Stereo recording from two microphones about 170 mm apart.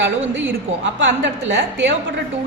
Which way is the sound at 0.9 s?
90° right.